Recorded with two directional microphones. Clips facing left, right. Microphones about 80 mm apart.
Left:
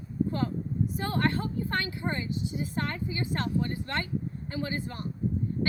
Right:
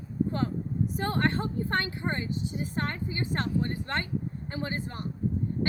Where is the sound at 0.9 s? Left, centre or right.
Right.